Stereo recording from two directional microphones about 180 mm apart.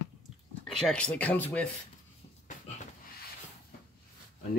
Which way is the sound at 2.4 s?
45° left (ahead or behind).